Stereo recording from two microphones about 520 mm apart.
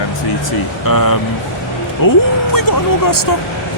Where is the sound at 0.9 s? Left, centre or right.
Left.